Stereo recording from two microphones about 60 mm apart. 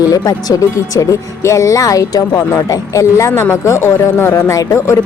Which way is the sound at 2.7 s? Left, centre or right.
Left.